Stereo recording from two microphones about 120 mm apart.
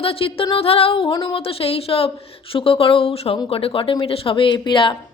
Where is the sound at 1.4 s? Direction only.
50° left (ahead or behind).